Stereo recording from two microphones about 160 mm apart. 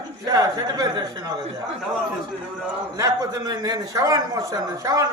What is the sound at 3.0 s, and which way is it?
A man's voice, 20° right (ahead or behind).